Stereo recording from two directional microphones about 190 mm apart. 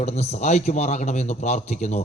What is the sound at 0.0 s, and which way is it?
A man's voice, 35° left (ahead or behind).